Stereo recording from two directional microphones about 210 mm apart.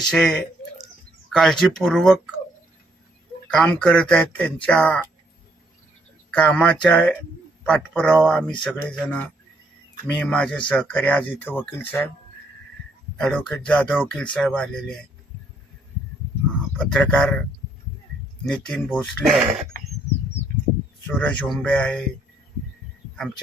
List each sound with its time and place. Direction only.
0.0 s speech: centre (ahead or behind)
3.5 s speech: 5° left (ahead or behind)
6.3 s speech: 5° left (ahead or behind)
13.1 s speech: 5° left (ahead or behind)
16.7 s speech: 5° left (ahead or behind)
18.5 s speech: 5° left (ahead or behind)
19.7 s a sound: 45° right (ahead or behind)
21.2 s speech: 5° left (ahead or behind)